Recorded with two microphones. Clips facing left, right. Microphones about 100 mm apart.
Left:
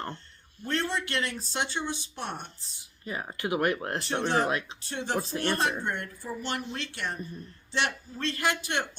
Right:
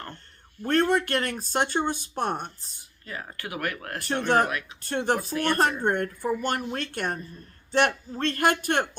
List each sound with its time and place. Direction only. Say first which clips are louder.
0.6 s speech: right 8 dB; 50° right (ahead or behind)
3.0 s speech: left 3 dB; 20° left (ahead or behind)
4.8 s speech: right 5 dB; 55° right (ahead or behind)